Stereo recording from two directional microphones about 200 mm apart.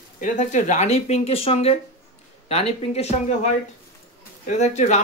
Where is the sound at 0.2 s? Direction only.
40° left (ahead or behind).